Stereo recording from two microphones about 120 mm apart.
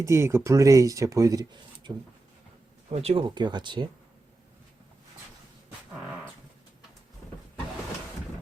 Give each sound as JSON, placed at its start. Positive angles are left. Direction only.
{"t": 0.0, "sound": "speech", "side_deg": -20}
{"t": 2.9, "sound": "speech", "side_deg": -55}